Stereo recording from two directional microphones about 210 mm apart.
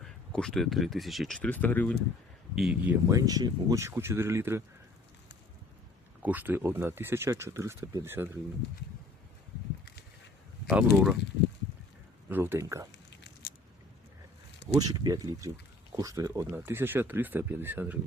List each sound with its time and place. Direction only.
0.0 s speech: centre (ahead or behind)
2.6 s speech: 5° right (ahead or behind)
6.2 s speech: 10° right (ahead or behind)
10.7 s speech: 5° right (ahead or behind)
12.3 s speech: 10° right (ahead or behind)
13.4 s biting: 45° left (ahead or behind)
14.8 s speech: 15° right (ahead or behind)